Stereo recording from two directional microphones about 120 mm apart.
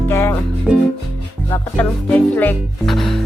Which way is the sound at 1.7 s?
15° left (ahead or behind).